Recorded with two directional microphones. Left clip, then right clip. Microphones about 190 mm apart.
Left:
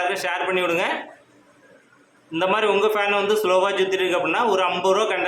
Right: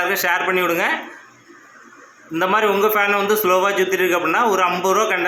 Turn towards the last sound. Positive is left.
turn(degrees=-15)  # may be behind; listen again after turning